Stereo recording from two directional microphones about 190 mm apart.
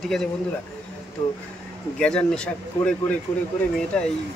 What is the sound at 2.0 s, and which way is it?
A man's voice, 5° left (ahead or behind).